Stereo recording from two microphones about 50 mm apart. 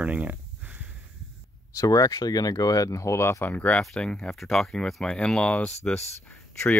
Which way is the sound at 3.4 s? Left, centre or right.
Left.